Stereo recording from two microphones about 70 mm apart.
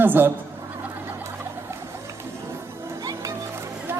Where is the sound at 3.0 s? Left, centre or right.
Right.